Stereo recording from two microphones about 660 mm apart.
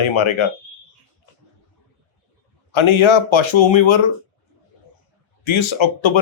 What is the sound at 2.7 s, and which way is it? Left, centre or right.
Speech, left.